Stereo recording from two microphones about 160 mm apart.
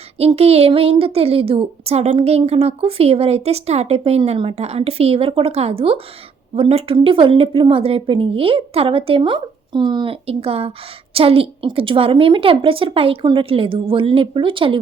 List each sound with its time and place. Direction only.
0.2 s a woman's voice: 40° right (ahead or behind)